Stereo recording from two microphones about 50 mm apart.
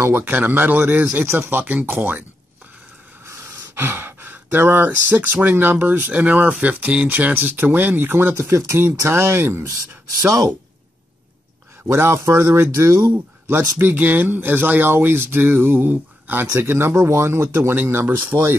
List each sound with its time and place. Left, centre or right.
0.1 s speech: right
1.2 s speech: right
1.5 s speech: right
3.7 s speech: right
8.5 s speech: right
8.8 s speech: right
11.9 s speech: right
13.9 s speech: right
17.1 s speech: right
17.8 s speech: right